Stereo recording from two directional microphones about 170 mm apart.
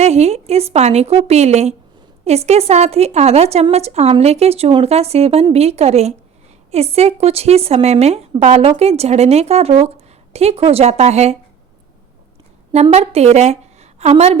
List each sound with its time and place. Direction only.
0.0 s a woman's voice: 40° right (ahead or behind)
12.7 s a woman's voice: 40° right (ahead or behind)